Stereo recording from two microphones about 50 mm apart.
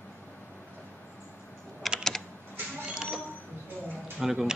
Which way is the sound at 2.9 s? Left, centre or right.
Centre.